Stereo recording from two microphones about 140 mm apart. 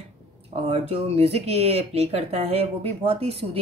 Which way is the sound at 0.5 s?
45° right (ahead or behind).